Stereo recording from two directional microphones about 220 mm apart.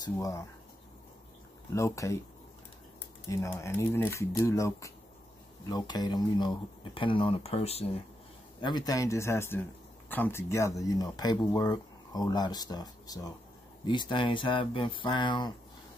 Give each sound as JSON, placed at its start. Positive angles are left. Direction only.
{"t": 0.0, "sound": "speech", "side_deg": 15}
{"t": 1.7, "sound": "speech", "side_deg": 15}
{"t": 3.3, "sound": "speech", "side_deg": 10}